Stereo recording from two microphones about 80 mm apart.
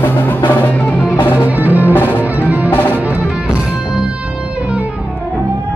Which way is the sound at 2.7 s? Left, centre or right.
Left.